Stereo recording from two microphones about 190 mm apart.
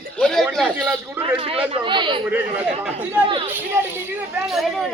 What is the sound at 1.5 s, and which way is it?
Speech, 25° right (ahead or behind).